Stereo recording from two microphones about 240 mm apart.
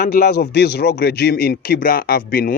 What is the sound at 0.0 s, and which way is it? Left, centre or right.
Speech, left.